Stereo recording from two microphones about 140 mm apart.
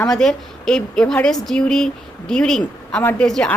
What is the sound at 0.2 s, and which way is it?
A woman's voice, 5° left (ahead or behind).